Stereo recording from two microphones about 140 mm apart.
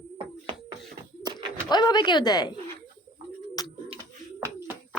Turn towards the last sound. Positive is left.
turn(degrees=-15)  # may be behind; listen again after turning